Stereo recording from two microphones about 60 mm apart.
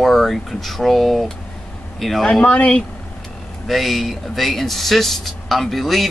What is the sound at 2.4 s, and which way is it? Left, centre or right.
Speech, left.